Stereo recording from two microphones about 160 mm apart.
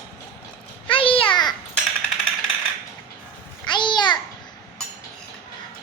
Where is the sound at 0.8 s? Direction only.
35° left (ahead or behind).